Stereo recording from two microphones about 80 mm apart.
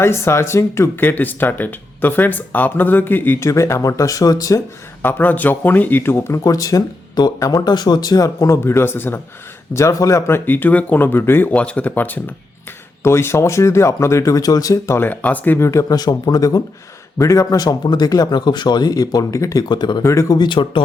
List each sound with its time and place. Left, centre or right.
0.0 s speech: left
3.5 s speech: left
5.0 s speech: left
6.4 s speech: left
9.7 s speech: left
11.5 s speech: centre
13.0 s speech: left
14.9 s speech: left
15.5 s speech: left
16.0 s speech: left
19.6 s speech: left
20.0 s speech: left
20.5 s speech: left